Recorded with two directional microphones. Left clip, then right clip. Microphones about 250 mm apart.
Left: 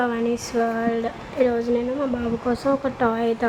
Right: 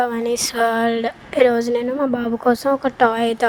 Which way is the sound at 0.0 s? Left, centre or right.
Right.